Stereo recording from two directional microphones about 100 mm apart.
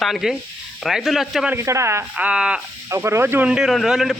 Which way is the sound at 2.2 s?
10° right (ahead or behind).